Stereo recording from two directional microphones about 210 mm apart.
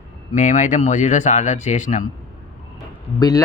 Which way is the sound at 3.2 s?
15° left (ahead or behind).